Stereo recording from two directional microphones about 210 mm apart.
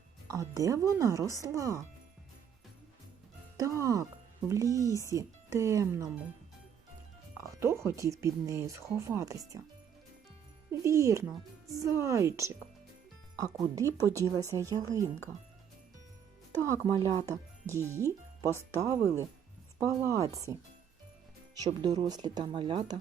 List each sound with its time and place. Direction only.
0.3 s speech: 15° right (ahead or behind)
3.6 s speech: 15° right (ahead or behind)
7.3 s speech: 15° right (ahead or behind)
10.7 s speech: 15° right (ahead or behind)
16.6 s speech: 15° right (ahead or behind)
21.7 s speech: 20° right (ahead or behind)